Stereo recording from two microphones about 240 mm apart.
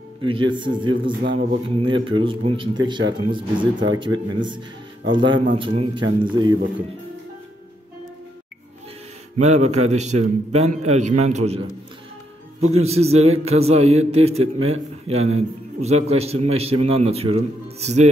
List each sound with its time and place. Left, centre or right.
0.2 s a man's voice: right
9.4 s a man's voice: right